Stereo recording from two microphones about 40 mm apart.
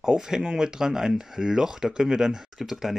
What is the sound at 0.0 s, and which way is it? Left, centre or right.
Speech, centre.